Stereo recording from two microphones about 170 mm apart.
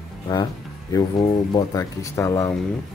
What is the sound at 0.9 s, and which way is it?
Speech, 20° left (ahead or behind).